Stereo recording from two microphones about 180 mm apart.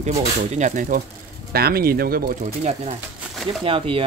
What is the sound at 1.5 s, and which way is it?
Speech, 60° right (ahead or behind).